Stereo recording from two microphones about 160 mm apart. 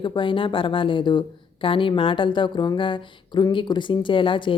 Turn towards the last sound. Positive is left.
turn(degrees=30)  # may be behind; listen again after turning